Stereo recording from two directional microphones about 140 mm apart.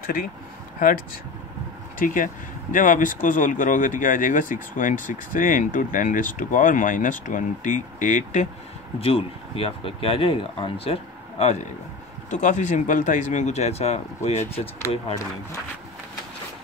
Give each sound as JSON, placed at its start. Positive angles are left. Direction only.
{"t": 0.0, "sound": "speech", "side_deg": 90}
{"t": 2.0, "sound": "speech", "side_deg": 70}
{"t": 9.0, "sound": "speech", "side_deg": 40}
{"t": 12.3, "sound": "speech", "side_deg": 60}